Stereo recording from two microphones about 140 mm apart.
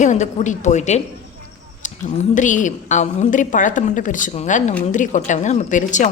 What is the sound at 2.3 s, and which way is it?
A woman's voice, 65° left (ahead or behind).